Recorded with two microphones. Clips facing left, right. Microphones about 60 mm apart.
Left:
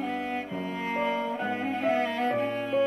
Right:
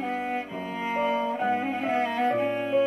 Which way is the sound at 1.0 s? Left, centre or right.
Right.